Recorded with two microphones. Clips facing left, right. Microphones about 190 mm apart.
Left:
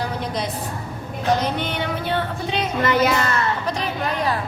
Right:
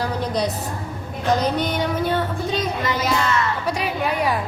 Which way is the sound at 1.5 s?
40° right (ahead or behind).